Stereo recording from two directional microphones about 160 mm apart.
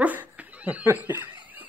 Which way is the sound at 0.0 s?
10° right (ahead or behind).